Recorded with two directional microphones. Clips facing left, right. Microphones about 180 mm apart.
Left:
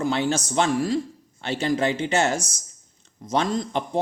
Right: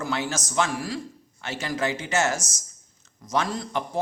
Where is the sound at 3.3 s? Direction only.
25° left (ahead or behind).